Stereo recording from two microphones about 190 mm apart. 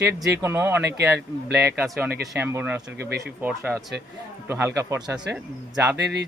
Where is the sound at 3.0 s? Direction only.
60° right (ahead or behind).